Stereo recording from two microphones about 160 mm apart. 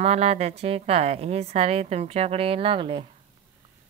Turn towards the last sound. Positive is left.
turn(degrees=-35)  # may be behind; listen again after turning